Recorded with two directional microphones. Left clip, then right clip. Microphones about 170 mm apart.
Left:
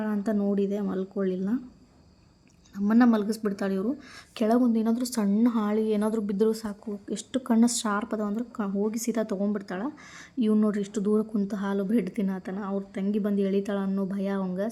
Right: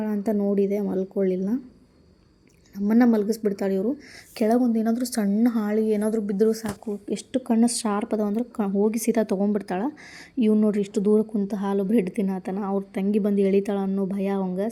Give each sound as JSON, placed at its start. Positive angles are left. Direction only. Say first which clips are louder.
{"t": 0.0, "sound": "speech", "louder": "right 3 dB", "side_deg": -10}
{"t": 2.7, "sound": "speech", "louder": "right 2 dB", "side_deg": -10}
{"t": 10.3, "sound": "speech", "louder": "right 4 dB", "side_deg": -5}